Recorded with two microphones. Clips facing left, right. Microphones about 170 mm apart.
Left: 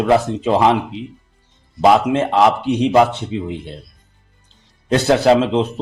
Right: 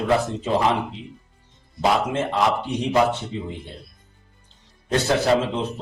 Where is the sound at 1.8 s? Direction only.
75° left (ahead or behind).